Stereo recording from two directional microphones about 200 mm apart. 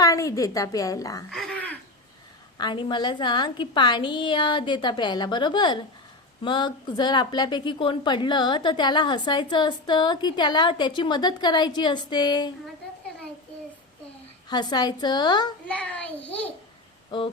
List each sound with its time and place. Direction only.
0.0 s a woman's voice: 15° left (ahead or behind)
1.3 s throat clearing: centre (ahead or behind)
2.6 s a woman's voice: 20° left (ahead or behind)
14.5 s a woman's voice: 20° left (ahead or behind)
15.6 s a woman's voice: 5° left (ahead or behind)
17.1 s a sound: 25° left (ahead or behind)